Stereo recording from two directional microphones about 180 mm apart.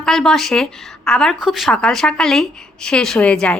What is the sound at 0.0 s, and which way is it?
A woman's voice, 5° left (ahead or behind).